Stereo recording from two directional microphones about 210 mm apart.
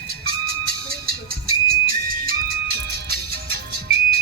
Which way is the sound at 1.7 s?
45° right (ahead or behind).